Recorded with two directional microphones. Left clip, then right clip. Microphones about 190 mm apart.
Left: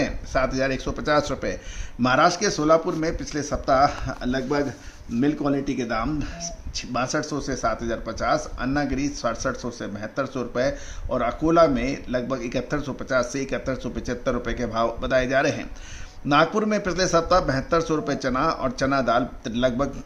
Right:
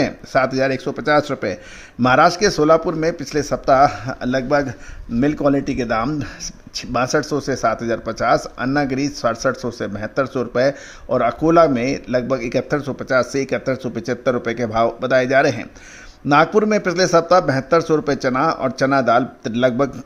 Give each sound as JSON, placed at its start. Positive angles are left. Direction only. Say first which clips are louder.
{"t": 0.0, "sound": "speech", "louder": "right 6 dB", "side_deg": -30}
{"t": 2.0, "sound": "speech", "louder": "right 6 dB", "side_deg": -40}